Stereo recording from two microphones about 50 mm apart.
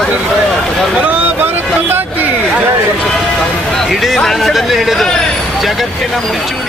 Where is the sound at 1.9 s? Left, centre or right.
Right.